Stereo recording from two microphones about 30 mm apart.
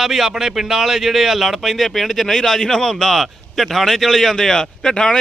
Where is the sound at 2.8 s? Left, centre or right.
Centre.